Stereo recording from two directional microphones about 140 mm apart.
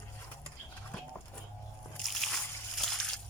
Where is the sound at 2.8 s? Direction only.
Centre (ahead or behind).